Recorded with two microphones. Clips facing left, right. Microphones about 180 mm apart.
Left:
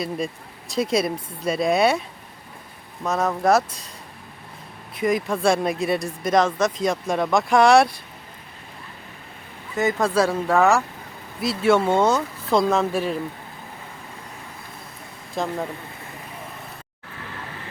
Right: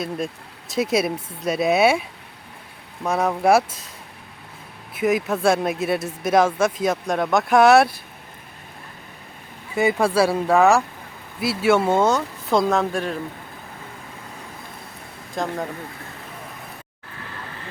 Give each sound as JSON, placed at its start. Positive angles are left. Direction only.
{"t": 0.7, "sound": "speech", "side_deg": -5}
{"t": 4.9, "sound": "speech", "side_deg": -5}
{"t": 9.7, "sound": "speech", "side_deg": -10}
{"t": 15.4, "sound": "speech", "side_deg": 0}